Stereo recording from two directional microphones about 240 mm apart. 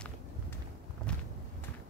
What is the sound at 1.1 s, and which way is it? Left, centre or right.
Walk, centre.